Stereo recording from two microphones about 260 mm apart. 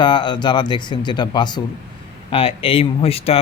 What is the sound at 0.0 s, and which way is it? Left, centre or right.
Speech, centre.